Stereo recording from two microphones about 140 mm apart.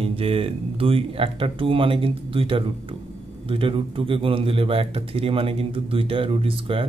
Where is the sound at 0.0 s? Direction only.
45° right (ahead or behind).